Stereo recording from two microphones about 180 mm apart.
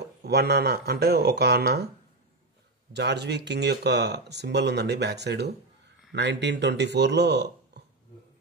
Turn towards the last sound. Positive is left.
turn(degrees=-70)  # may be behind; listen again after turning